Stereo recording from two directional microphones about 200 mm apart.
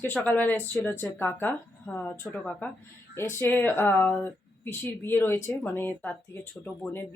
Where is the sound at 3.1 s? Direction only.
10° left (ahead or behind).